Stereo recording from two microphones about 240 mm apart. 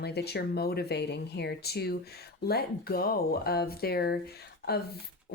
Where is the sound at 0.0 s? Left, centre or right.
Left.